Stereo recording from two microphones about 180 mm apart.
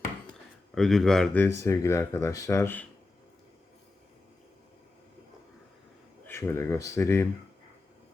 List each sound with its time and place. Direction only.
0.7 s speech: centre (ahead or behind)
6.2 s speech: 15° left (ahead or behind)